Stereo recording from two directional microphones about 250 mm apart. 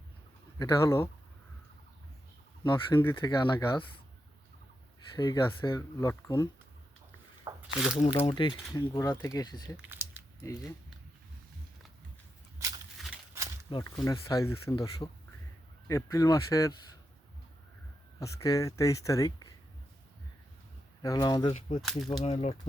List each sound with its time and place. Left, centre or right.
0.6 s speech: centre
2.6 s speech: centre
5.1 s speech: centre
7.5 s squish: centre
7.9 s speech: left
9.7 s a sound: centre
10.4 s speech: centre
13.0 s a sound: centre
13.7 s speech: centre
18.2 s speech: centre
21.0 s speech: centre
21.8 s speech: centre
22.2 s speech: left